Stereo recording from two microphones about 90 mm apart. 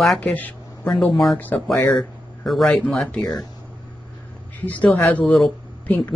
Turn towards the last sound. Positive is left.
turn(degrees=5)  # may be behind; listen again after turning